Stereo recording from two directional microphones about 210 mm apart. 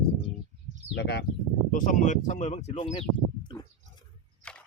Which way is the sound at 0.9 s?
50° left (ahead or behind).